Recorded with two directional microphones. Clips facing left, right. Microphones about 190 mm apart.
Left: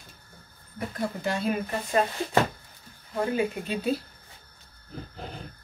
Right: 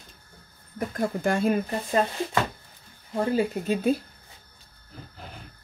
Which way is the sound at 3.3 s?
45° right (ahead or behind).